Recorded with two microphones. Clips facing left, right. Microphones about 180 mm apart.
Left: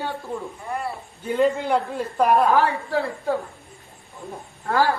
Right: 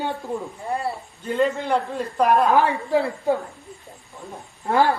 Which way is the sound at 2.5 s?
20° right (ahead or behind).